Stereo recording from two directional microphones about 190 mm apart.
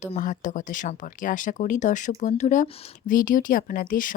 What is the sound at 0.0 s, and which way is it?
Speech, 40° left (ahead or behind).